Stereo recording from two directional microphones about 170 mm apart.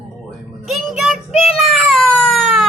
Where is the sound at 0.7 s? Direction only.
Centre (ahead or behind).